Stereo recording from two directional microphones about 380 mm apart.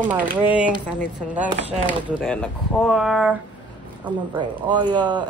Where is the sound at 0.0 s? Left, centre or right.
Centre.